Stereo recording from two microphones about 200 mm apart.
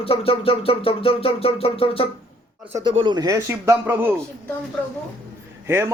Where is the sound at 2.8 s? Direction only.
25° right (ahead or behind).